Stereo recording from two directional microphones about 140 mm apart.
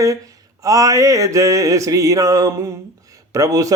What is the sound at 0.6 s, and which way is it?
Mantra, 25° right (ahead or behind).